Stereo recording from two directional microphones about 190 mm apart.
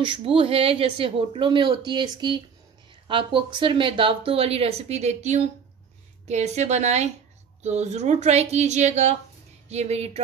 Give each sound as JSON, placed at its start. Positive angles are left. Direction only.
{"t": 0.0, "sound": "speech", "side_deg": -30}